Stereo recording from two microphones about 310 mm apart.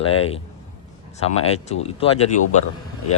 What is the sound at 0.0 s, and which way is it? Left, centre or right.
Speech, centre.